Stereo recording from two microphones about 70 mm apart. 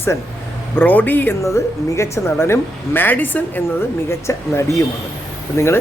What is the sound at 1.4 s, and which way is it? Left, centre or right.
Speech, left.